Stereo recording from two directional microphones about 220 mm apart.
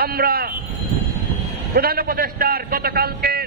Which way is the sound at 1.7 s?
45° right (ahead or behind).